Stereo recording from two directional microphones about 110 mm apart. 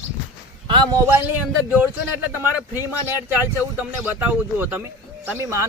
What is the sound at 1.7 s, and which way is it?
A man's voice, 15° right (ahead or behind).